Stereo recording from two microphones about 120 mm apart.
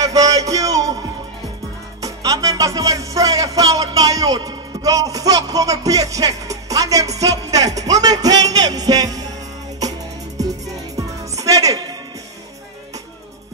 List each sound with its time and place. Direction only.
0.0 s music: 30° right (ahead or behind)
2.0 s music: 30° right (ahead or behind)